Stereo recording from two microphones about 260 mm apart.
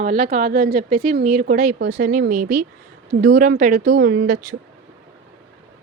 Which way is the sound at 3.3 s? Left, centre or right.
Right.